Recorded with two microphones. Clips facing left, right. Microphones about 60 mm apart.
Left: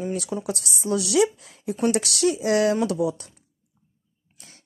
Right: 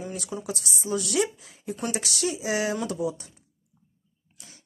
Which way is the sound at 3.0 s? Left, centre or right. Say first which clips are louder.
Left 4 dB; left.